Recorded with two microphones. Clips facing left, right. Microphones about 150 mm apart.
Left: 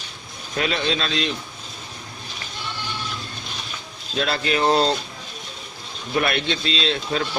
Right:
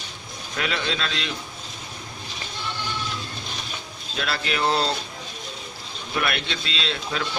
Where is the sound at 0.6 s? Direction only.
25° left (ahead or behind).